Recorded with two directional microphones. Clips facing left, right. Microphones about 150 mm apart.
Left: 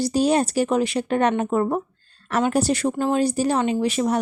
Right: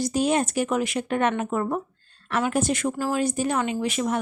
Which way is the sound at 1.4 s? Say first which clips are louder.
Left 4 dB; 30° left (ahead or behind).